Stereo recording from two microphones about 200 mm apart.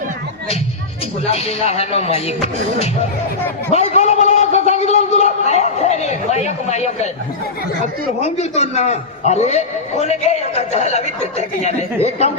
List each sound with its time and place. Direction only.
1.2 s a man's voice: 30° left (ahead or behind)
8.2 s a man's voice: 35° left (ahead or behind)